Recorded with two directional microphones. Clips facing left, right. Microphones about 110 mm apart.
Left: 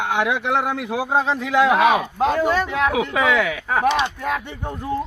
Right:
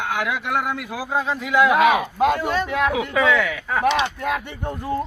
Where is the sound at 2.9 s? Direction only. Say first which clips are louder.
Even; 15° left (ahead or behind).